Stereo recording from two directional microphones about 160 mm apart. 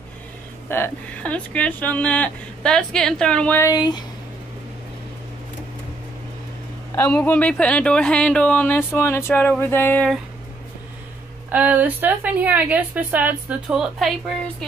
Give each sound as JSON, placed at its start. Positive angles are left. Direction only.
{"t": 0.7, "sound": "speech", "side_deg": 15}
{"t": 3.6, "sound": "speech", "side_deg": 25}
{"t": 7.0, "sound": "speech", "side_deg": 10}
{"t": 11.5, "sound": "a woman's voice", "side_deg": -10}